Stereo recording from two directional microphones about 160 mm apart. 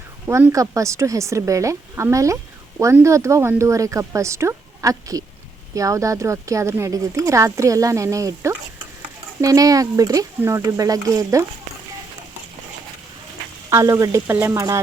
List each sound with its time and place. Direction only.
0.3 s a woman's voice: 15° right (ahead or behind)
13.7 s a woman's voice: 20° right (ahead or behind)